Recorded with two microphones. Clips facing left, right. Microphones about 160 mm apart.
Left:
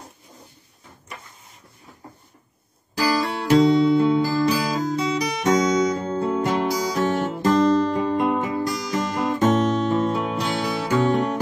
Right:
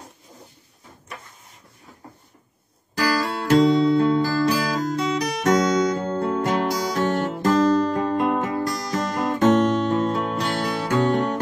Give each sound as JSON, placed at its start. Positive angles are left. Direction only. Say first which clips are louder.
{"t": 3.0, "sound": "music", "louder": "left 1 dB", "side_deg": 5}